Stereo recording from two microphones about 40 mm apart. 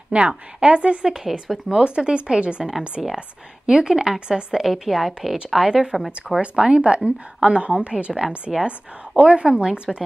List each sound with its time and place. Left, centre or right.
0.1 s a woman's voice: right
1.0 s a woman's voice: centre
4.6 s a woman's voice: centre
5.7 s a woman's voice: centre